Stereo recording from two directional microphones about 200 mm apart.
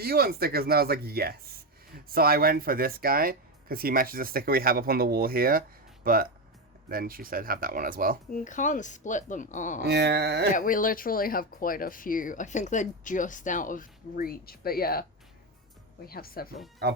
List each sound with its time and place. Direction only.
0.0 s speech: 50° right (ahead or behind)
8.3 s speech: 40° left (ahead or behind)
9.8 s carnatic music: 55° right (ahead or behind)
10.5 s speech: 45° left (ahead or behind)
16.0 s speech: 50° left (ahead or behind)